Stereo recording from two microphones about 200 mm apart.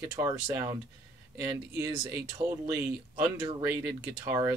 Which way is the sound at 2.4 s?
30° right (ahead or behind).